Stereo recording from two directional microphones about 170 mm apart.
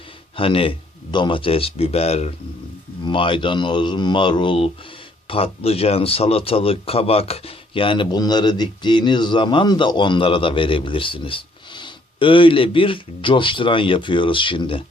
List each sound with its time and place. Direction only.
0.3 s speech: 30° left (ahead or behind)